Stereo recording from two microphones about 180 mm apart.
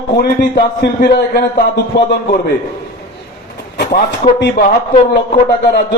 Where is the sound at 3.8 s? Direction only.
60° left (ahead or behind).